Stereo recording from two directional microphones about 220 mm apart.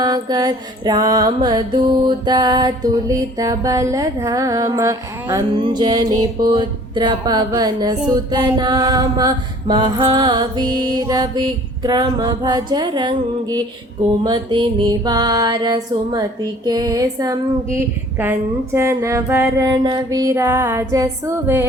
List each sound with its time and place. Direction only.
0.0 s music: 20° right (ahead or behind)
6.5 s mantra: 20° right (ahead or behind)
16.6 s music: 15° right (ahead or behind)